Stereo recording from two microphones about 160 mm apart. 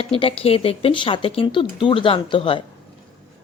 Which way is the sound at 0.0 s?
35° left (ahead or behind).